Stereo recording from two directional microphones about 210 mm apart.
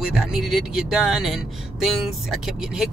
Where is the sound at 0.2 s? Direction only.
Centre (ahead or behind).